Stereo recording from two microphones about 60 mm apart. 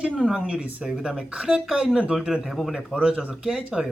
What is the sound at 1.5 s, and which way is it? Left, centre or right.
Speech, centre.